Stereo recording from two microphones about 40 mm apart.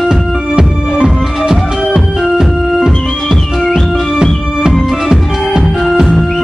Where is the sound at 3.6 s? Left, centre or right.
Centre.